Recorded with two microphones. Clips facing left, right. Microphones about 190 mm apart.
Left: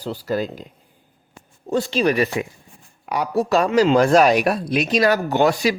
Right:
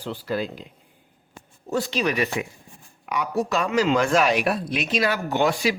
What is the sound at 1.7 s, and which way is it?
Speech, 30° left (ahead or behind).